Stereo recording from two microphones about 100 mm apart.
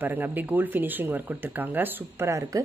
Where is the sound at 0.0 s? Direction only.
20° right (ahead or behind).